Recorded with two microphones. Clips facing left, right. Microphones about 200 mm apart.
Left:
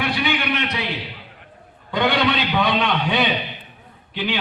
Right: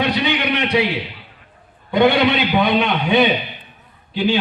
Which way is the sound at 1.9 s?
25° right (ahead or behind).